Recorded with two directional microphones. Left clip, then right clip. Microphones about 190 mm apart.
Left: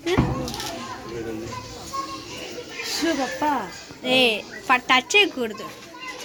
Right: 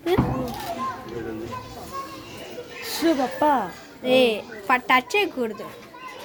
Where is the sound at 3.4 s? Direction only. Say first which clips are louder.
Right 4 dB; 55° right (ahead or behind).